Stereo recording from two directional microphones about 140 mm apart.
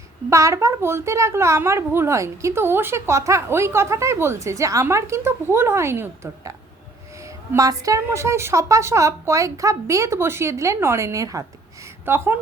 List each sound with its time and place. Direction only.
0.3 s a woman's voice: 20° right (ahead or behind)